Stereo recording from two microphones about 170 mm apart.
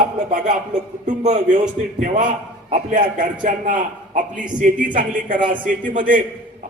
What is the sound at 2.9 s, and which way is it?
A man's voice, 50° right (ahead or behind).